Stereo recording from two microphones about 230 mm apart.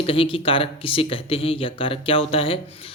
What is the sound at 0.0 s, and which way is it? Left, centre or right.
Speech, left.